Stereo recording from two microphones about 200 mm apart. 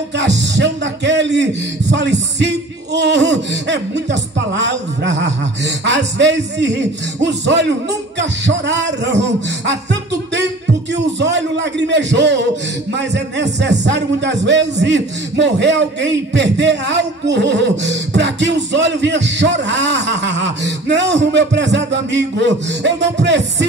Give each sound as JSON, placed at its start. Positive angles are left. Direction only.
{"t": 0.2, "sound": "speech", "side_deg": -60}
{"t": 11.1, "sound": "speech", "side_deg": -60}